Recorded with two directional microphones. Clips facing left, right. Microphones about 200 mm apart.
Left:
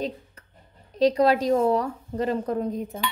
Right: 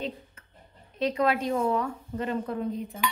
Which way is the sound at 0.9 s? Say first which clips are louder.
Left 6 dB; 35° left (ahead or behind).